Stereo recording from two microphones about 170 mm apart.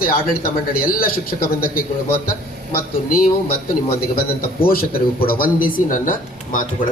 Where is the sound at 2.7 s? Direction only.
60° left (ahead or behind).